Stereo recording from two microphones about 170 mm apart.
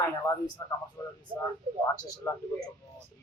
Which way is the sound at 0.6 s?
20° left (ahead or behind).